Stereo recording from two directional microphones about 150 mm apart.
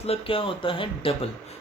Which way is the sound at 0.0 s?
40° left (ahead or behind).